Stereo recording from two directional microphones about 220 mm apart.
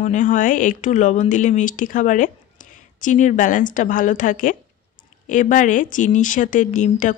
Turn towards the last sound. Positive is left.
turn(degrees=35)  # may be behind; listen again after turning